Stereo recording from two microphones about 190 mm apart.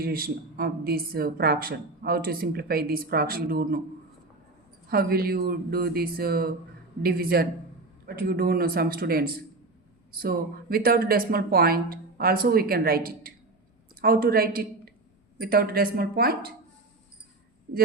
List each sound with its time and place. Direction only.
0.0 s a woman's voice: 50° right (ahead or behind)
4.9 s a woman's voice: 55° right (ahead or behind)